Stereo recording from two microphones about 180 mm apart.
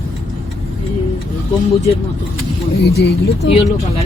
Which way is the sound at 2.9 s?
65° left (ahead or behind).